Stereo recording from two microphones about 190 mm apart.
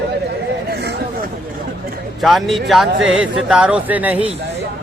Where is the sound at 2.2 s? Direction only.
Centre (ahead or behind).